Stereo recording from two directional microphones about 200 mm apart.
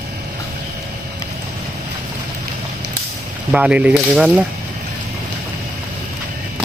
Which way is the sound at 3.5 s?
5° right (ahead or behind).